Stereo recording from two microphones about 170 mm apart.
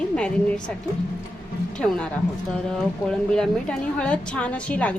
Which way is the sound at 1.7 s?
5° left (ahead or behind).